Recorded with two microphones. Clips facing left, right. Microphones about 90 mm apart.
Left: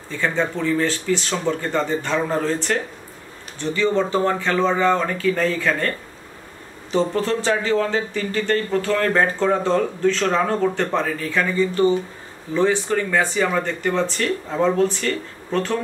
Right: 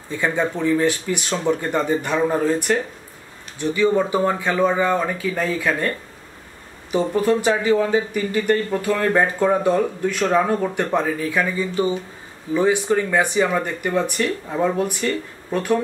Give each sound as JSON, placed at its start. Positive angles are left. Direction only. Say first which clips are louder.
{"t": 0.1, "sound": "speech", "louder": "right 1 dB", "side_deg": -15}